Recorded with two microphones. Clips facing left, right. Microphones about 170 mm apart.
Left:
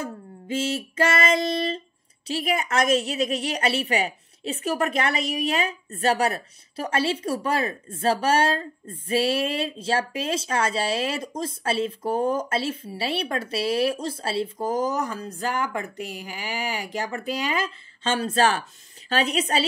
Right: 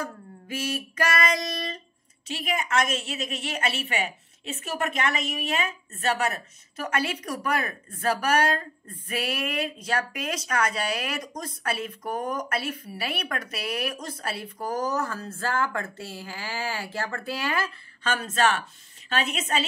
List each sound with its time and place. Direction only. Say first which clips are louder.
0.0 s child singing: left 2 dB; 25° left (ahead or behind)
2.2 s a woman's voice: left 4 dB; 35° left (ahead or behind)